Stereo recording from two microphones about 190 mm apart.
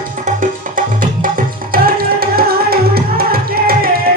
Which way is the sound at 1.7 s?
50° right (ahead or behind).